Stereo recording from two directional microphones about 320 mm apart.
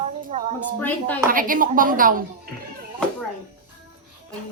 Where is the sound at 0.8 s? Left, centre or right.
Centre.